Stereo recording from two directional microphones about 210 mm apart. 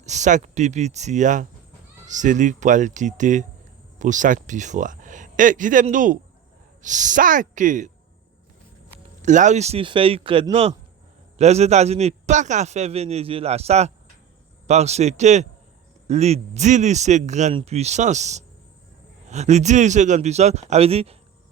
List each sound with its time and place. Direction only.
0.0 s a man's voice: 35° right (ahead or behind)
9.2 s a man's voice: 35° right (ahead or behind)